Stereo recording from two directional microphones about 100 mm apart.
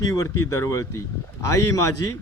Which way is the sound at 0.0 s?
35° left (ahead or behind).